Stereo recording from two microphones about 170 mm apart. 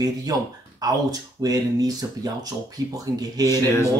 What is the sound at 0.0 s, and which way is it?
Speech, 20° right (ahead or behind).